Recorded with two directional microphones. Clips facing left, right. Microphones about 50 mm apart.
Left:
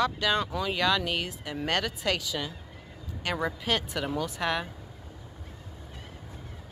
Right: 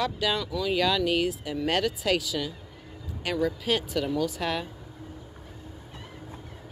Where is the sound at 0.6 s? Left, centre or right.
Centre.